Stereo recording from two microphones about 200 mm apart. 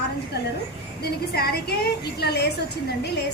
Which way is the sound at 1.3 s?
50° left (ahead or behind).